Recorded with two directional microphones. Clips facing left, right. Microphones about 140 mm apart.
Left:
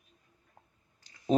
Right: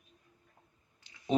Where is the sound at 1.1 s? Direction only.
40° left (ahead or behind).